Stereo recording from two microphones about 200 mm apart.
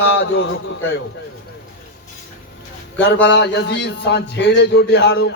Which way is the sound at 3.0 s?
60° left (ahead or behind).